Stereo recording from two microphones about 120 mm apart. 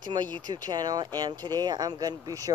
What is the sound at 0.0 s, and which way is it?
Speech, 35° right (ahead or behind).